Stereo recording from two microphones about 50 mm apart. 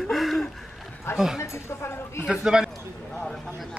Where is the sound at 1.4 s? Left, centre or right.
Left.